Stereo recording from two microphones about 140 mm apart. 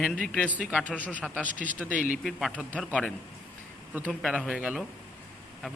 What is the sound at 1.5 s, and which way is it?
Speech, 65° right (ahead or behind).